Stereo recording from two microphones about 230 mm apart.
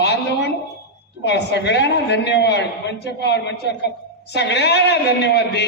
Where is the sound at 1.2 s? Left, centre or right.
Left.